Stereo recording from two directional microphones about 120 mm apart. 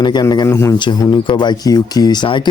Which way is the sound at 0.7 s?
40° left (ahead or behind).